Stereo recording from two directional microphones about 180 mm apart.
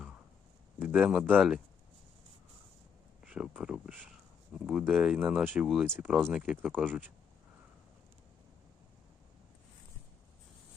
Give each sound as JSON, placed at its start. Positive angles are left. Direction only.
{"t": 0.8, "sound": "speech", "side_deg": -5}
{"t": 3.2, "sound": "speech", "side_deg": -5}
{"t": 6.0, "sound": "speech", "side_deg": -10}